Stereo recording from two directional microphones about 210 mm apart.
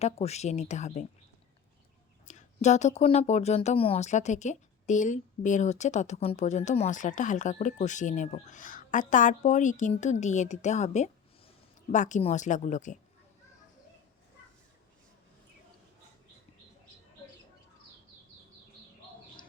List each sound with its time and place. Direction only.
0.0 s speech: 30° left (ahead or behind)
2.2 s speech: 35° left (ahead or behind)